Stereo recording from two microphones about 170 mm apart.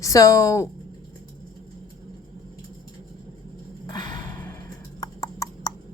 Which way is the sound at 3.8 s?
25° left (ahead or behind).